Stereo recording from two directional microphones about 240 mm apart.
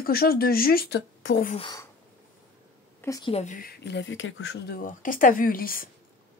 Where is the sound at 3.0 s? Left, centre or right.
Centre.